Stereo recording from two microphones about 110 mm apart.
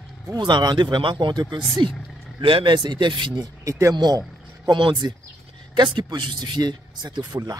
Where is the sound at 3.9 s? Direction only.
40° right (ahead or behind).